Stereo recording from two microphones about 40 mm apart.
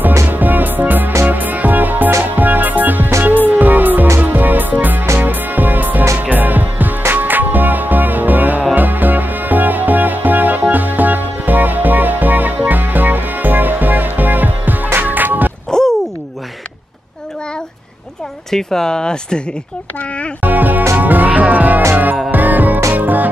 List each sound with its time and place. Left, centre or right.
0.0 s music: right
15.7 s a sound: centre
18.5 s speech: centre
20.4 s speech: right
21.0 s music: right